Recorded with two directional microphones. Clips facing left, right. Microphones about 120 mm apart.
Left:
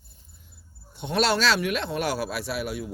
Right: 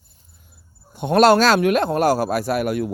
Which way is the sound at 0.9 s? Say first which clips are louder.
Right 10 dB; 50° right (ahead or behind).